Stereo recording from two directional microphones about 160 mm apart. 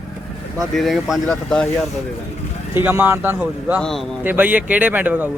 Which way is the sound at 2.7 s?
10° right (ahead or behind).